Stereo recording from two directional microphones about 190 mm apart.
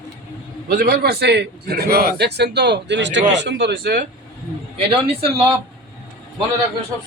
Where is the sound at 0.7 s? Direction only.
50° right (ahead or behind).